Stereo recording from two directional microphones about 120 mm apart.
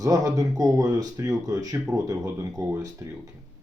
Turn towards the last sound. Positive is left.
turn(degrees=-25)  # may be behind; listen again after turning